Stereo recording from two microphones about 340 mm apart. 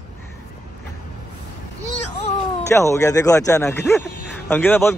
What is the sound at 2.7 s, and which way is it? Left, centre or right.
Speech, centre.